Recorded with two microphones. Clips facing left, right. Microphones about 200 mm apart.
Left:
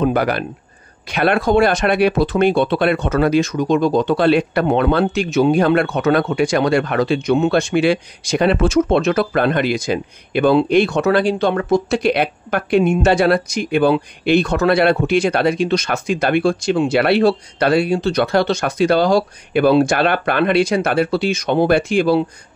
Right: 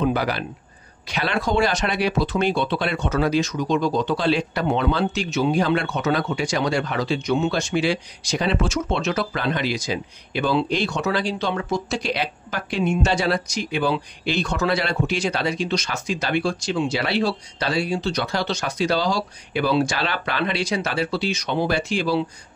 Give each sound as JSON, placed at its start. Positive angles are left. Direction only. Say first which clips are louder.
{"t": 0.0, "sound": "speech", "louder": "left 5 dB", "side_deg": 55}